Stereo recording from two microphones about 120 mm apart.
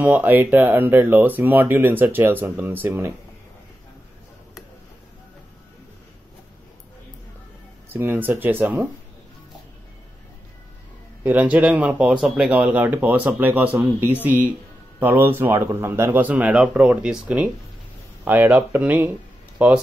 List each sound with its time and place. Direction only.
0.0 s speech: 15° right (ahead or behind)
7.9 s speech: 15° right (ahead or behind)
11.2 s speech: 15° right (ahead or behind)